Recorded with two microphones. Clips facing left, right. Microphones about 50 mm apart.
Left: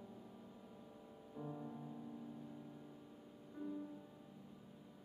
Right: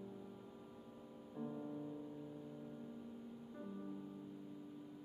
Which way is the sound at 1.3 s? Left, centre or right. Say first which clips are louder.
Right 3 dB; centre.